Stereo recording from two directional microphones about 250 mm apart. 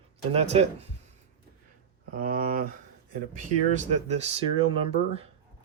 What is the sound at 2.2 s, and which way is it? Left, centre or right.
Speech, right.